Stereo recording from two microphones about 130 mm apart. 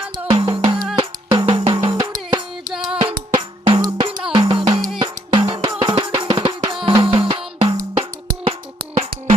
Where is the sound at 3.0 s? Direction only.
35° right (ahead or behind).